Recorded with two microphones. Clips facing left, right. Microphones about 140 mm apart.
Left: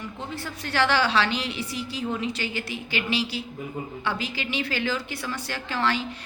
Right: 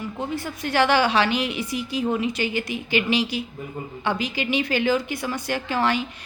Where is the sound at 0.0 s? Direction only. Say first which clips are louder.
Right 6 dB; 15° right (ahead or behind).